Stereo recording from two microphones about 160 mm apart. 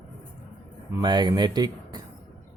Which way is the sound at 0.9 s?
25° right (ahead or behind).